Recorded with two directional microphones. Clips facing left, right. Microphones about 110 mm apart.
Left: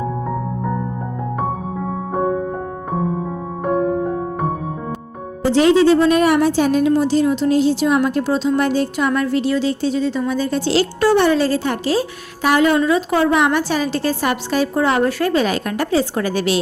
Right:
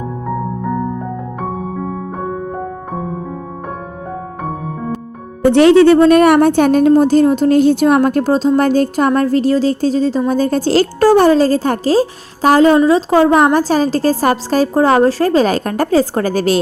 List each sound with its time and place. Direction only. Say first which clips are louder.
5.4 s speech: right 5 dB; 60° right (ahead or behind); by 16.6 s 40° right (ahead or behind)